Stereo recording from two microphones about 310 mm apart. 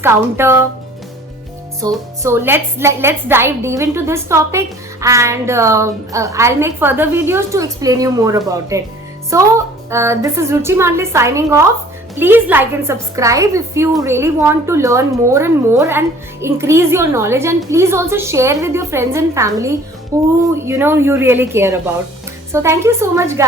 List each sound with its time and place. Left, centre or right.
0.0 s a woman's voice: centre
1.8 s a woman's voice: centre
9.9 s a woman's voice: centre